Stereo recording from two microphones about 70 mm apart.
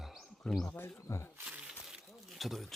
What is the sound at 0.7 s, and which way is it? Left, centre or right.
Speech, left.